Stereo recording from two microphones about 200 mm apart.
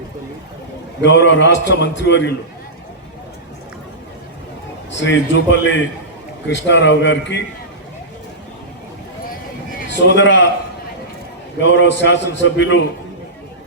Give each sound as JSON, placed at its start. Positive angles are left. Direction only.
{"t": 1.0, "sound": "a man's voice", "side_deg": 60}
{"t": 4.9, "sound": "a man's voice", "side_deg": 65}
{"t": 9.9, "sound": "a man's voice", "side_deg": 60}
{"t": 11.6, "sound": "a man's voice", "side_deg": 60}